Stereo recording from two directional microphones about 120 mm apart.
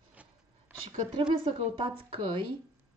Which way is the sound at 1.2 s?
40° right (ahead or behind).